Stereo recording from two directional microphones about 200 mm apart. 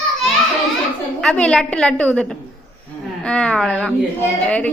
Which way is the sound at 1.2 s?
5° left (ahead or behind).